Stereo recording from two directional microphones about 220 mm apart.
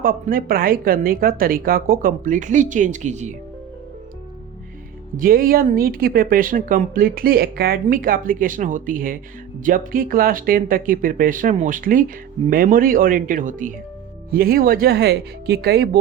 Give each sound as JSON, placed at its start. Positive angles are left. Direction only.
{"t": 0.0, "sound": "speech", "side_deg": -40}
{"t": 5.1, "sound": "speech", "side_deg": -40}